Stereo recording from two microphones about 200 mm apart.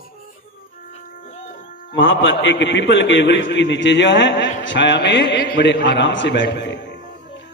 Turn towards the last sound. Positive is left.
turn(degrees=60)  # may be behind; listen again after turning